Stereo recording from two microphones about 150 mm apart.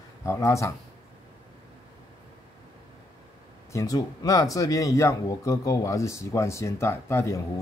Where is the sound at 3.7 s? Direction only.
25° left (ahead or behind).